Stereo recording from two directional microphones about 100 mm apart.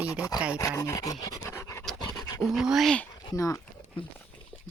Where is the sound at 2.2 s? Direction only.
40° left (ahead or behind).